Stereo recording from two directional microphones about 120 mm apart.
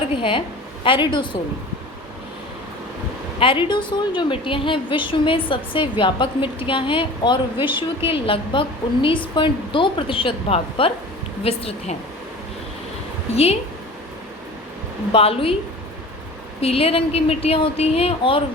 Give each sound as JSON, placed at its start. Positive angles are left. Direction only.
{"t": 0.2, "sound": "a woman's voice", "side_deg": 45}
{"t": 3.4, "sound": "a woman's voice", "side_deg": 45}
{"t": 13.3, "sound": "a woman's voice", "side_deg": 60}
{"t": 15.1, "sound": "a woman's voice", "side_deg": 50}
{"t": 16.6, "sound": "a woman's voice", "side_deg": 55}